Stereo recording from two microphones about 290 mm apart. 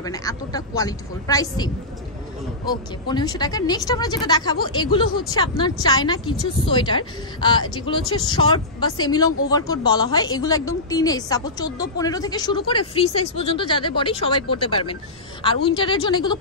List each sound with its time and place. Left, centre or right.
0.0 s speech: centre